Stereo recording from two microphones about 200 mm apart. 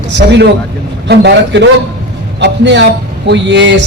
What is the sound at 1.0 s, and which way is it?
A man's voice, 60° right (ahead or behind).